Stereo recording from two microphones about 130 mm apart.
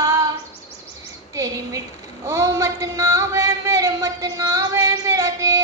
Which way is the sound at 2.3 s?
25° right (ahead or behind).